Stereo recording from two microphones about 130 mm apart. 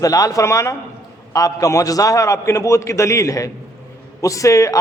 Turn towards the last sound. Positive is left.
turn(degrees=25)  # may be behind; listen again after turning